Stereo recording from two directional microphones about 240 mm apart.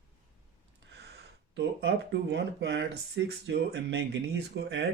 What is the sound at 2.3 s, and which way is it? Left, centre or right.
Speech, right.